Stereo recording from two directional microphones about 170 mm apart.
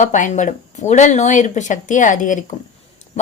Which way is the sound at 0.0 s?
45° left (ahead or behind).